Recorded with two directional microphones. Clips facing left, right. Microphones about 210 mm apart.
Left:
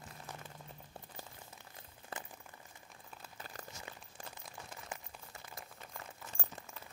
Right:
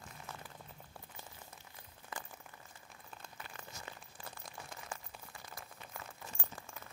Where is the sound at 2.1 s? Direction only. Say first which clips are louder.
Left 1 dB; 30° left (ahead or behind).